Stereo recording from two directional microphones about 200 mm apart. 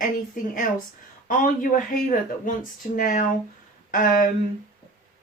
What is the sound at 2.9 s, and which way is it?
Speech, 45° left (ahead or behind).